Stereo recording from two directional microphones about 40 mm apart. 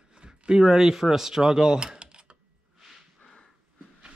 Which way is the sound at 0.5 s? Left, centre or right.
Centre.